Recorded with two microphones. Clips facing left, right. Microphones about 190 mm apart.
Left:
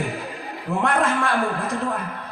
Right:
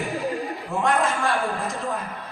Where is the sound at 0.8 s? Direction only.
60° left (ahead or behind).